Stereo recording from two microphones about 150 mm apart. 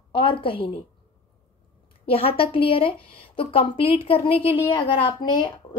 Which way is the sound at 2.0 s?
40° left (ahead or behind).